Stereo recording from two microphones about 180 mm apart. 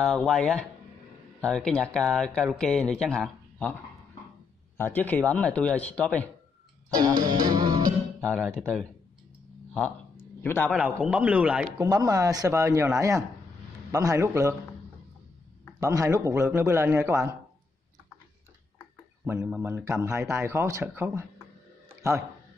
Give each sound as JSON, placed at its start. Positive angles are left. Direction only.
{"t": 0.0, "sound": "speech", "side_deg": 0}
{"t": 4.7, "sound": "speech", "side_deg": 10}
{"t": 7.0, "sound": "music", "side_deg": -20}
{"t": 8.2, "sound": "speech", "side_deg": 5}
{"t": 10.4, "sound": "speech", "side_deg": 10}
{"t": 10.7, "sound": "speech", "side_deg": 0}
{"t": 11.9, "sound": "speech", "side_deg": -20}
{"t": 15.8, "sound": "speech", "side_deg": -20}
{"t": 19.2, "sound": "speech", "side_deg": -10}
{"t": 21.8, "sound": "a sound", "side_deg": -15}